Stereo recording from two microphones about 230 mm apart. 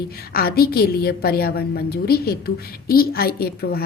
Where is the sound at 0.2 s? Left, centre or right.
Left.